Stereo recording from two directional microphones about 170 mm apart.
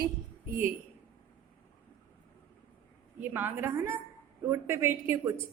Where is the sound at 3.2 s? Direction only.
10° right (ahead or behind).